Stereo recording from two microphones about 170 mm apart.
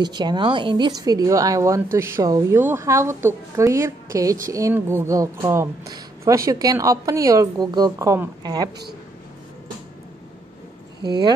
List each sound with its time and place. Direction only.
0.0 s a woman's voice: 25° right (ahead or behind)
11.0 s speech: 25° right (ahead or behind)